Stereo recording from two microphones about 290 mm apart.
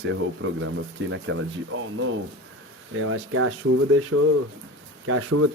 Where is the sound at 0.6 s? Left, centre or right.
Right.